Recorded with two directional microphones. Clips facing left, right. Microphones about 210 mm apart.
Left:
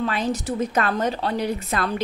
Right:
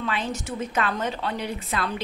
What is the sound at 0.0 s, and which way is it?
A woman's voice, 40° left (ahead or behind).